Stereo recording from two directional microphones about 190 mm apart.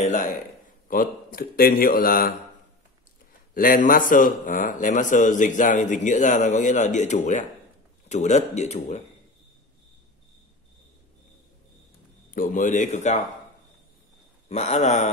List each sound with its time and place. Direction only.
0.0 s a sound: 45° left (ahead or behind)
0.8 s speech: 50° left (ahead or behind)
3.5 s a man's voice: 50° left (ahead or behind)
12.4 s a man's voice: 45° left (ahead or behind)
14.5 s a man's voice: 35° left (ahead or behind)